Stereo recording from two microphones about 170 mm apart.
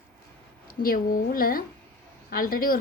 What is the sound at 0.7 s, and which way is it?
A woman's voice, 60° left (ahead or behind).